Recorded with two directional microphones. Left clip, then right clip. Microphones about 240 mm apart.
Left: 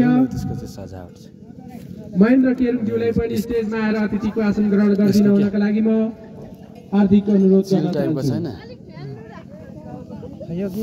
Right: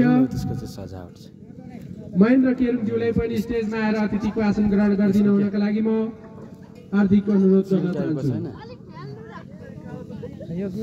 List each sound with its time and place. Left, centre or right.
0.0 s a sound: centre
0.3 s speech: centre
2.1 s a man's voice: centre
7.6 s a man's voice: left